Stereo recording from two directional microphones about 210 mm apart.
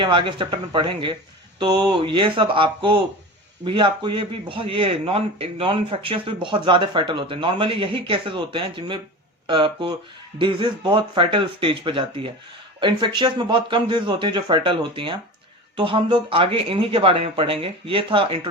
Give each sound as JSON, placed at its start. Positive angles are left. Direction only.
{"t": 0.0, "sound": "a man's voice", "side_deg": -20}